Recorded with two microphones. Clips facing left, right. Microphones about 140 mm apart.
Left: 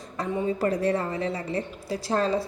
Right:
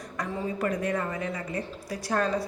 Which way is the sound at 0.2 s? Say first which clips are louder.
Left 4 dB; 30° left (ahead or behind).